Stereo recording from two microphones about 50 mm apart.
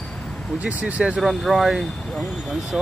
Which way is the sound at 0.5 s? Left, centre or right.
Right.